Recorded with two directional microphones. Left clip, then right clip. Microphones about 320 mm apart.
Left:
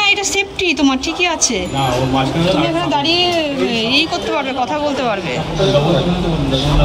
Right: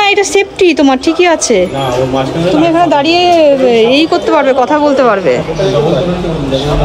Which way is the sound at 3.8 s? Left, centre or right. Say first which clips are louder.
Right 7 dB; centre.